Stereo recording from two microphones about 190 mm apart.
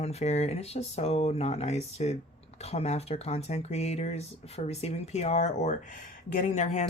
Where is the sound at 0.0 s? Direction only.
35° left (ahead or behind).